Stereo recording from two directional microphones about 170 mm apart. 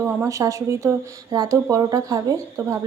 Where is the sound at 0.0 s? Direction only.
15° right (ahead or behind).